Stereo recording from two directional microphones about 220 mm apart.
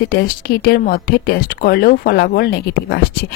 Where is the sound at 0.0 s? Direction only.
45° left (ahead or behind).